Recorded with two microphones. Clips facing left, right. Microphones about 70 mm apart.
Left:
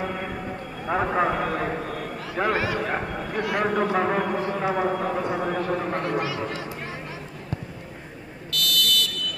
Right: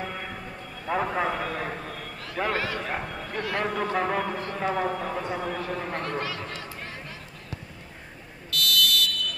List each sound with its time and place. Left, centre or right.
0.0 s a sound: centre
2.3 s a man's voice: centre
8.5 s fire alarm: centre